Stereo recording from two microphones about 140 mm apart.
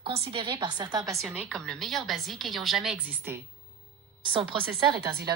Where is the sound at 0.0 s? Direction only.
45° right (ahead or behind).